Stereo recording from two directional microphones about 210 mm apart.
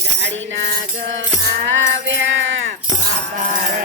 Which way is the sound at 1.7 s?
60° right (ahead or behind).